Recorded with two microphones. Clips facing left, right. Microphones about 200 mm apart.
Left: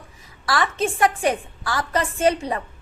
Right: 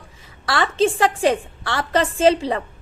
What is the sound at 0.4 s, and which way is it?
A woman's voice, 30° right (ahead or behind).